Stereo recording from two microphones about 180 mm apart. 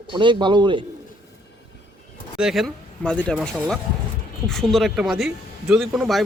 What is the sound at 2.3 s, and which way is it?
Speech, centre (ahead or behind).